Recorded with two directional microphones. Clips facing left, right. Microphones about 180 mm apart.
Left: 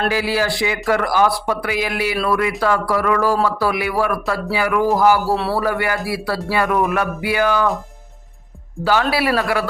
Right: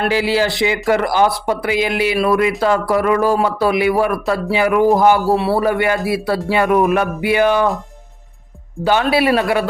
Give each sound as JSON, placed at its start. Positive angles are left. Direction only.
{"t": 0.1, "sound": "speech", "side_deg": -25}
{"t": 8.8, "sound": "speech", "side_deg": -20}